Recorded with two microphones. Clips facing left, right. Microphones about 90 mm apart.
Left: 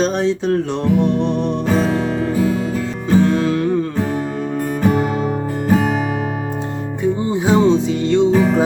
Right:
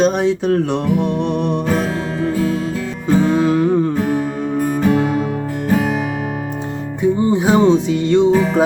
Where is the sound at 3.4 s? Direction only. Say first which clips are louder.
Right 3 dB; 15° right (ahead or behind).